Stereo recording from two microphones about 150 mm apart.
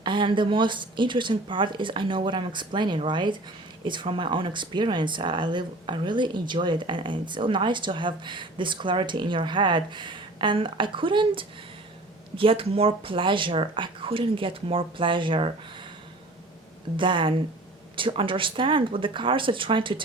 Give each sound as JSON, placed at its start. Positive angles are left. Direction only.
{"t": 0.0, "sound": "speech", "side_deg": -35}
{"t": 17.0, "sound": "speech", "side_deg": -35}